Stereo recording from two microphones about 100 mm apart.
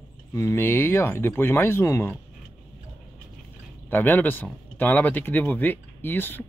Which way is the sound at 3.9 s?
20° left (ahead or behind).